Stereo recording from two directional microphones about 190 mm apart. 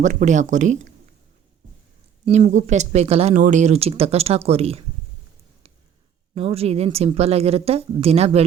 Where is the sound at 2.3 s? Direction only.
40° right (ahead or behind).